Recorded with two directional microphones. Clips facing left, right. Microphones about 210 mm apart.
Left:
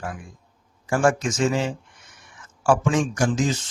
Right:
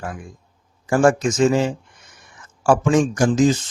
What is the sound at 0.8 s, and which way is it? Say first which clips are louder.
Speech: right 5 dB; 40° right (ahead or behind).